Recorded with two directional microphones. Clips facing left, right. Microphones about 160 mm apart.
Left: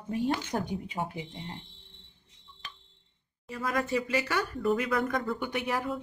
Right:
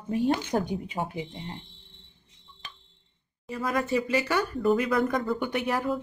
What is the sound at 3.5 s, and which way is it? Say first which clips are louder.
Speech: right 3 dB; 25° right (ahead or behind).